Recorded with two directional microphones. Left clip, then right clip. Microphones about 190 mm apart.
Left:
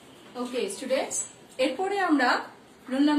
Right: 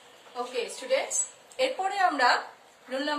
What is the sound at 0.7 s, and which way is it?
Speech, 20° right (ahead or behind).